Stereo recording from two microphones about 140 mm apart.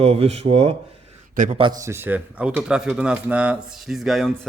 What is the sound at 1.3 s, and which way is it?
Speech, 65° right (ahead or behind).